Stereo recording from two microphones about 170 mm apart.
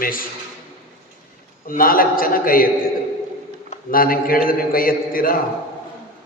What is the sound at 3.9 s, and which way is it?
A man's voice, 60° left (ahead or behind).